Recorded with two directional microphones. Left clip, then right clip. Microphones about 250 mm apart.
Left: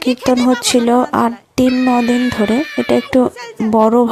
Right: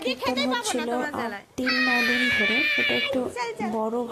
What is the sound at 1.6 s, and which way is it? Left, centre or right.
A woman's voice, left.